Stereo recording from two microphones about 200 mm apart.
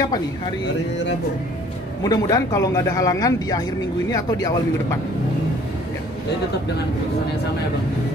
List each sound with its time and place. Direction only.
2.0 s speech: 15° left (ahead or behind)